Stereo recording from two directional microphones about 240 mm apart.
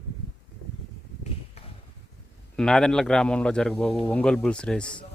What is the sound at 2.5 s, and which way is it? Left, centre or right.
A man's voice, centre.